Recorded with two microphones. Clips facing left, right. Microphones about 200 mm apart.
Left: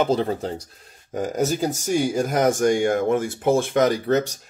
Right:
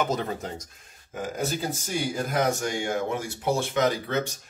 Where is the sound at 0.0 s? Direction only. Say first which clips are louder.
Left 7 dB; 30° left (ahead or behind).